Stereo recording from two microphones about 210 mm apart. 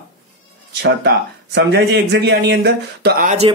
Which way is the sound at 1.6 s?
55° right (ahead or behind).